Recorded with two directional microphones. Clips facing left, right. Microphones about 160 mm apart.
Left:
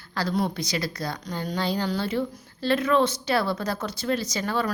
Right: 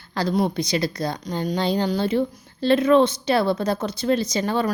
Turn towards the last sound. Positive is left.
turn(degrees=-20)  # may be behind; listen again after turning